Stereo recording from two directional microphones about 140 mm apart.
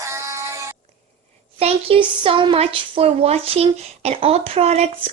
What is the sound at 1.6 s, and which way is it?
Speech, 40° right (ahead or behind).